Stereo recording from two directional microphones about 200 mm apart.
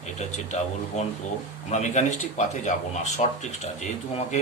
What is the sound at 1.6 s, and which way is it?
Speech, 35° left (ahead or behind).